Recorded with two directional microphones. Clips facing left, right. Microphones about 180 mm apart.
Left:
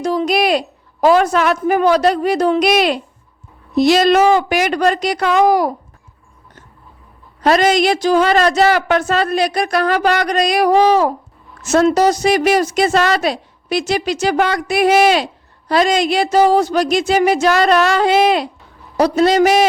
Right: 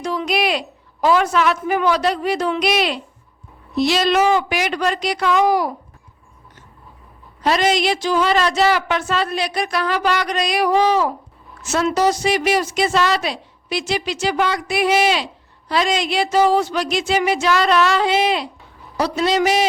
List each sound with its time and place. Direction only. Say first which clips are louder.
0.0 s a woman's voice: left 5 dB; 35° left (ahead or behind)
7.4 s a woman's voice: left 5 dB; 50° left (ahead or behind)